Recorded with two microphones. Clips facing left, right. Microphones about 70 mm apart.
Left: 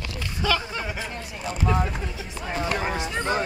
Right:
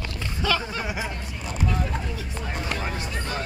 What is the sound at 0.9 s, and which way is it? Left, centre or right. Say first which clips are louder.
Speech: right 2 dB; centre.